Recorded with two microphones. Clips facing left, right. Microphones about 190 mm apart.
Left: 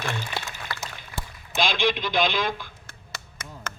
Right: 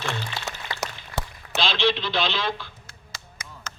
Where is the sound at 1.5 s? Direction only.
15° left (ahead or behind).